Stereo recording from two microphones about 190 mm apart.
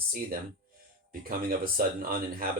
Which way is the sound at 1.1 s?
50° right (ahead or behind).